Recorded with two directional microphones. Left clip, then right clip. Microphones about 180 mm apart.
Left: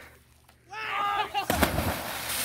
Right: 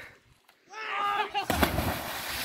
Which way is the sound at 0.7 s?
45° left (ahead or behind).